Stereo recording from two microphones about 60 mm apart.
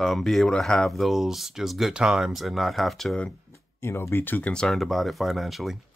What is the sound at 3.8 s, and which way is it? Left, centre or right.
Speech, left.